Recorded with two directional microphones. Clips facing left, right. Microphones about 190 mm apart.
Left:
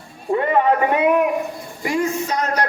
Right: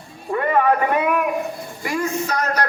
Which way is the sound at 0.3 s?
25° left (ahead or behind).